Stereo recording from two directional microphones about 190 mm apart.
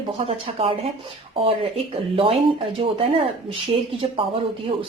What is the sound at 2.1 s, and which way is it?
Speech, 30° right (ahead or behind).